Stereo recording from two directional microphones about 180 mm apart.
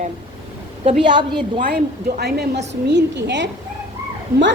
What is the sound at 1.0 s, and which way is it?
Speech, 25° right (ahead or behind).